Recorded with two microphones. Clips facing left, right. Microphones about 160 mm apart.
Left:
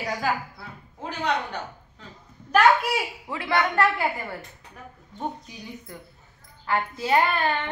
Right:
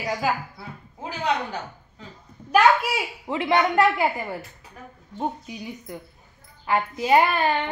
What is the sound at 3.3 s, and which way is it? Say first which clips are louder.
Speech: right 5 dB; 20° right (ahead or behind).